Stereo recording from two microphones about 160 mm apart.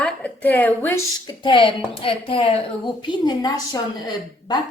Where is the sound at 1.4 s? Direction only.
30° left (ahead or behind).